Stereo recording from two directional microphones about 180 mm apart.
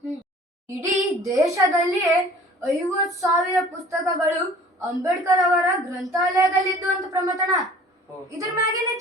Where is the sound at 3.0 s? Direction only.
Centre (ahead or behind).